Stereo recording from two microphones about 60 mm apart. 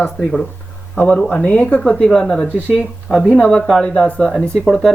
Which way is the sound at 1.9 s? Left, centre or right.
Centre.